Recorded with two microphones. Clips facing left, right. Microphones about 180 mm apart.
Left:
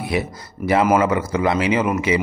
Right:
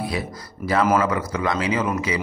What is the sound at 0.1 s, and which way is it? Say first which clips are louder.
Speech: left 5 dB; 25° left (ahead or behind).